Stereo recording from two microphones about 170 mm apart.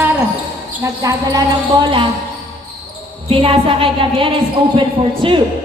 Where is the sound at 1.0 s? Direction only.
20° right (ahead or behind).